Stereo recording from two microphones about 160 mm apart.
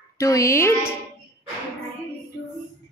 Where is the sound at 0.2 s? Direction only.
20° left (ahead or behind).